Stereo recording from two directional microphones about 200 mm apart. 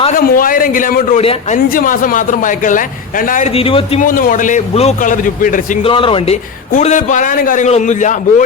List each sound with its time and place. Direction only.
0.2 s a man's voice: 45° left (ahead or behind)
1.2 s speech: 30° left (ahead or behind)
1.5 s a man's voice: 45° left (ahead or behind)
4.0 s a man's voice: 40° left (ahead or behind)
5.8 s a man's voice: 25° left (ahead or behind)